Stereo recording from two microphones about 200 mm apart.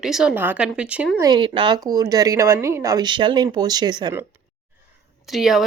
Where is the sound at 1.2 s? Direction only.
20° right (ahead or behind).